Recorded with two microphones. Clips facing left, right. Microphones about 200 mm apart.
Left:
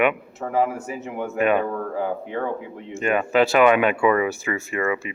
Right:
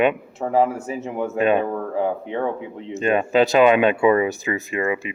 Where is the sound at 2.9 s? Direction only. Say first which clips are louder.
Right 2 dB; 20° right (ahead or behind).